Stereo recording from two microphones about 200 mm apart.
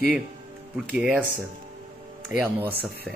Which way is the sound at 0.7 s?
Centre (ahead or behind).